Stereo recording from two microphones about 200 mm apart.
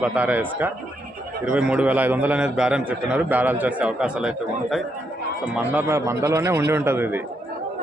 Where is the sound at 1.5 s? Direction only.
5° right (ahead or behind).